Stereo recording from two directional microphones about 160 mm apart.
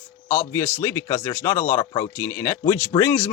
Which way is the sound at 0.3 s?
15° left (ahead or behind).